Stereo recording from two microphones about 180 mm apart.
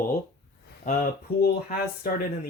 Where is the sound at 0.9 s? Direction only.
55° left (ahead or behind).